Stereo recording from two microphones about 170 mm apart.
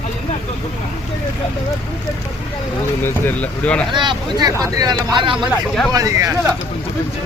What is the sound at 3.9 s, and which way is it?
Speech, 25° right (ahead or behind).